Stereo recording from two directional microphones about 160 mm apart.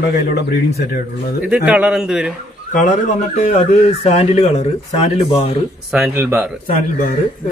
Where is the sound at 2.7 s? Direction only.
55° left (ahead or behind).